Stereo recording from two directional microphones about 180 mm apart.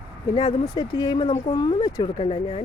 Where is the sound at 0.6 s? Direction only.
25° left (ahead or behind).